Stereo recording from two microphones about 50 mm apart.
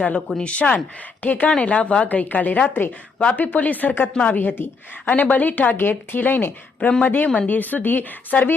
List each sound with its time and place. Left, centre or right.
0.3 s speech: left
2.0 s speech: left
2.6 s speech: left
3.2 s speech: left
4.1 s speech: left
4.4 s speech: left
6.7 s speech: left
7.4 s speech: left